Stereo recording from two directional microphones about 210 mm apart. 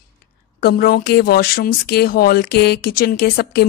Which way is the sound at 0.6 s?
45° left (ahead or behind).